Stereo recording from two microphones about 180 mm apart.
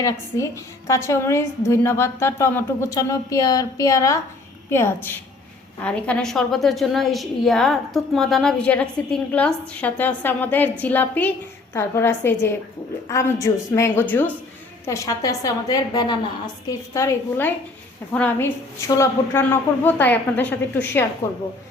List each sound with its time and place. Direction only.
0.0 s a woman's voice: 15° left (ahead or behind)
21.2 s a woman's voice: 35° left (ahead or behind)